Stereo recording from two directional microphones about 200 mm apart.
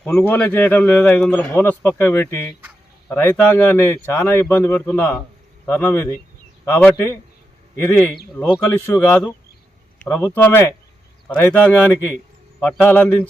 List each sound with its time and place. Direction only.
0.0 s a man's voice: 10° left (ahead or behind)